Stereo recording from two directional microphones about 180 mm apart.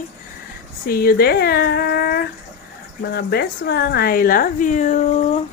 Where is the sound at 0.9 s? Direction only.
55° left (ahead or behind); by 5.4 s 40° left (ahead or behind).